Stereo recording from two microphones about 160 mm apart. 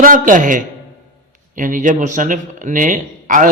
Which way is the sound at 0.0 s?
55° right (ahead or behind).